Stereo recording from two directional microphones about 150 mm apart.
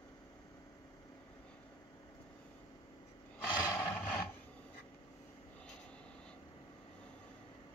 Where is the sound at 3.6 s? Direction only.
15° left (ahead or behind).